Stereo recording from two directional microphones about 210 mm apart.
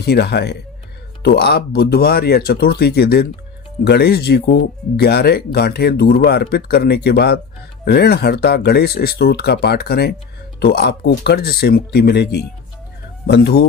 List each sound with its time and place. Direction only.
0.0 s speech: 50° left (ahead or behind)